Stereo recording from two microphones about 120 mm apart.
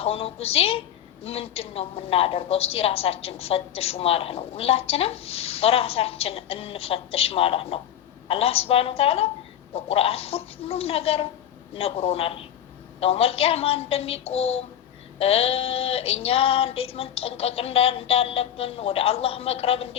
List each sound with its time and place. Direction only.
0.0 s a woman's voice: 55° left (ahead or behind)